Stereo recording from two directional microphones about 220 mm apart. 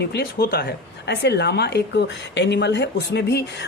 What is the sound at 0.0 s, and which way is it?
A woman's voice, 45° left (ahead or behind).